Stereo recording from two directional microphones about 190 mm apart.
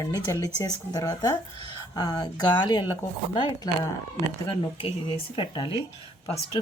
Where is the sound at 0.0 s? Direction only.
20° left (ahead or behind).